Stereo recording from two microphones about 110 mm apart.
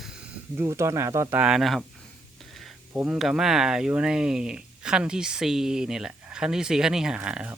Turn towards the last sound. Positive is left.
turn(degrees=-10)  # may be behind; listen again after turning